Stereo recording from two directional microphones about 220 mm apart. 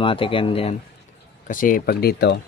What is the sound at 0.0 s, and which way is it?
Speech, 25° left (ahead or behind).